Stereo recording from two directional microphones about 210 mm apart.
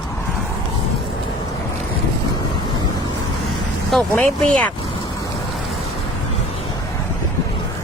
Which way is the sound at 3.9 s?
5° left (ahead or behind).